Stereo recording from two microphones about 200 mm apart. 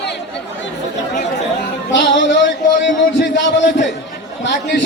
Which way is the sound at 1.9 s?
65° left (ahead or behind).